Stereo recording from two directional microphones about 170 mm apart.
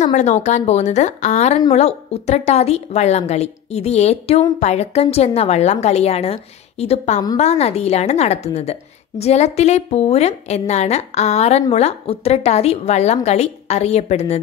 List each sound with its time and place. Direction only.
0.0 s a woman's voice: 45° left (ahead or behind)